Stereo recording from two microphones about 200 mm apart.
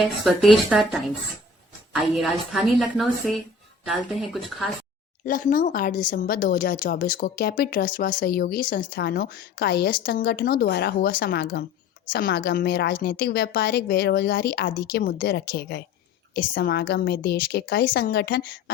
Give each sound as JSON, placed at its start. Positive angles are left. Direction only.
{"t": 0.3, "sound": "a woman's voice", "side_deg": 0}
{"t": 2.1, "sound": "a woman's voice", "side_deg": 0}
{"t": 5.2, "sound": "speech", "side_deg": 45}